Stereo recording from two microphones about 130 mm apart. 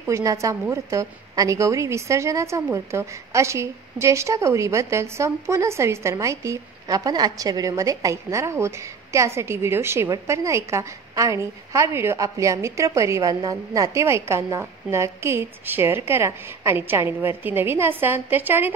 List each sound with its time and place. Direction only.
0.0 s a woman's voice: 25° right (ahead or behind)